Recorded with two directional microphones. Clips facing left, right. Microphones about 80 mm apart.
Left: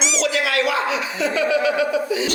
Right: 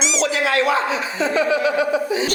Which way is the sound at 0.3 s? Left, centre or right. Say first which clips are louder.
Right 3 dB; right.